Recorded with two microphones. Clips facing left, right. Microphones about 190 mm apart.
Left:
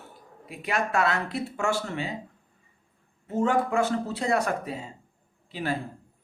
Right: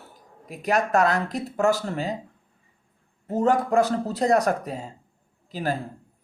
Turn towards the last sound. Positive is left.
turn(degrees=-40)  # may be behind; listen again after turning